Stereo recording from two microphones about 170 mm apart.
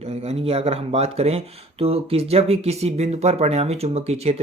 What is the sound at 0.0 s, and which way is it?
Speech, 40° right (ahead or behind).